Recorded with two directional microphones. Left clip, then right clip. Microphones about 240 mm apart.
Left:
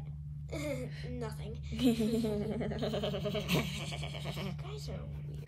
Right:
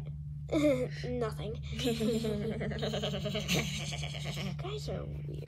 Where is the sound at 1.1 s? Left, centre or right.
Centre.